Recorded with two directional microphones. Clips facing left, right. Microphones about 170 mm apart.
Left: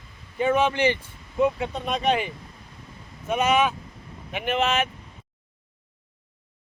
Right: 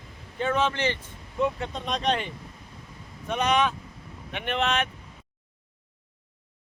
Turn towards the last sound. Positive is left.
turn(degrees=5)  # may be behind; listen again after turning